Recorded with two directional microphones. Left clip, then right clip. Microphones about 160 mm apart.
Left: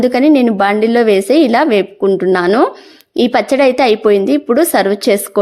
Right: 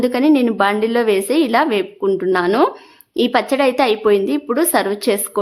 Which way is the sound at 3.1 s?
25° left (ahead or behind).